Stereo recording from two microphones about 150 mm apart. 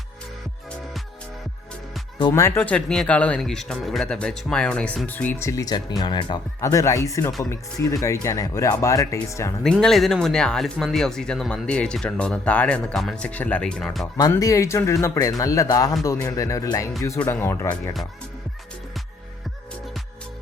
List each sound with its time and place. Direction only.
2.1 s speech: 25° left (ahead or behind)
2.6 s speech: 5° left (ahead or behind); by 6.4 s 30° left (ahead or behind)
6.6 s speech: 20° left (ahead or behind)
9.7 s speech: centre (ahead or behind)
14.2 s speech: 25° left (ahead or behind)